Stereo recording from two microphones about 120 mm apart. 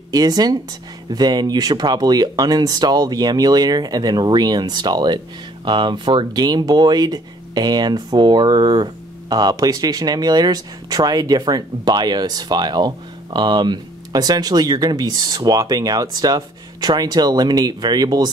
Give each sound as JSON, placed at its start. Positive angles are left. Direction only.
{"t": 0.1, "sound": "speech", "side_deg": -35}